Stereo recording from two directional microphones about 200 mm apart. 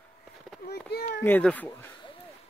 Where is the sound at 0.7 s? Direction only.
55° left (ahead or behind).